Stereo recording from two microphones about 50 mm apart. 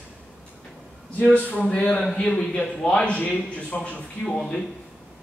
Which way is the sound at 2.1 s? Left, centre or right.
Centre.